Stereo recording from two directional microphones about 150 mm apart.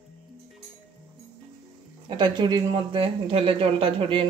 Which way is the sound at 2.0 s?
30° right (ahead or behind).